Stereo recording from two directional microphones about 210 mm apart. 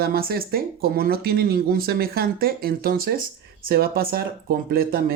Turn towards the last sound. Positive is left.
turn(degrees=-45)  # may be behind; listen again after turning